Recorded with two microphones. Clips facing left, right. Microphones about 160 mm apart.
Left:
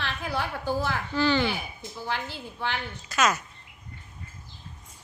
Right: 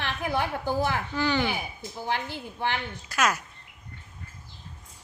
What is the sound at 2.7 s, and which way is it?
Speech, 10° right (ahead or behind).